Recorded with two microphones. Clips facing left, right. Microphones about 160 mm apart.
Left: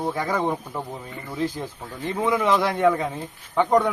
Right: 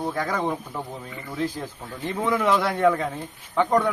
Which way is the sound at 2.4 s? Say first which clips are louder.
Even; centre (ahead or behind).